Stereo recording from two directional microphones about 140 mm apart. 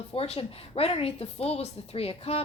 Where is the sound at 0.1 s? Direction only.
45° left (ahead or behind).